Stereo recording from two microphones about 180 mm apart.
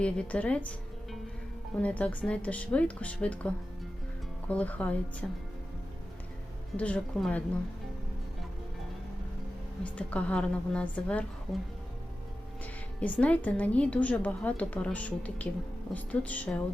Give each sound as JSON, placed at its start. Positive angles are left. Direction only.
{"t": 0.0, "sound": "a woman's voice", "side_deg": 5}
{"t": 6.7, "sound": "a woman's voice", "side_deg": 5}
{"t": 9.8, "sound": "a woman's voice", "side_deg": 5}
{"t": 13.0, "sound": "a woman's voice", "side_deg": 5}